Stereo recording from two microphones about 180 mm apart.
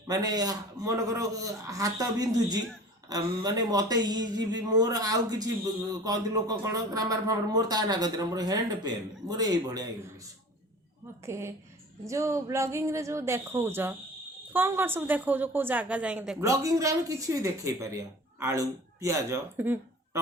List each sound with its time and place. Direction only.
0.1 s a man's voice: 20° right (ahead or behind)
11.3 s speech: 15° right (ahead or behind)
16.4 s speech: 15° right (ahead or behind)